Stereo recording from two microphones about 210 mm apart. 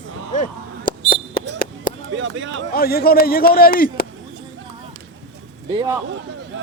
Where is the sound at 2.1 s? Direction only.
65° right (ahead or behind).